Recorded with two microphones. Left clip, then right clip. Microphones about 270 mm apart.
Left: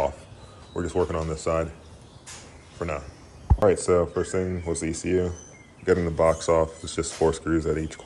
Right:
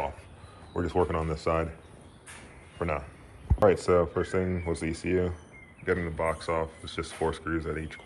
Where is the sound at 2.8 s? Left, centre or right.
Centre.